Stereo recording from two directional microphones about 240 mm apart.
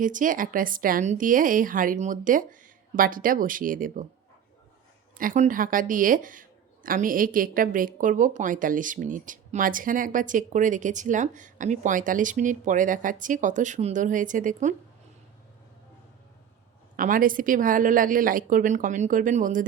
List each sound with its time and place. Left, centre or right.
0.0 s speech: right
5.1 s speech: right
17.0 s speech: right